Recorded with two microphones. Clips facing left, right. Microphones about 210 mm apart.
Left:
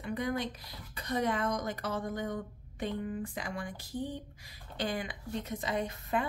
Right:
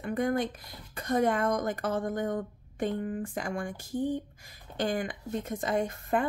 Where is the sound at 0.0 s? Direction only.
50° right (ahead or behind).